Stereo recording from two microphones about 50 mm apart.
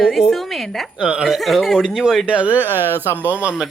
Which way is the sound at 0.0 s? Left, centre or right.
Centre.